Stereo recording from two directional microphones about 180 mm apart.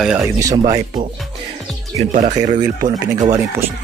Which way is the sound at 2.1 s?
40° right (ahead or behind).